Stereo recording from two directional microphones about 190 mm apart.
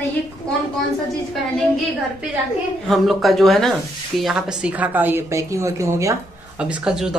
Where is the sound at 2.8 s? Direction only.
Centre (ahead or behind).